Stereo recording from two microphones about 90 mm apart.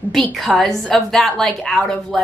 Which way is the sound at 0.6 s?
Centre (ahead or behind).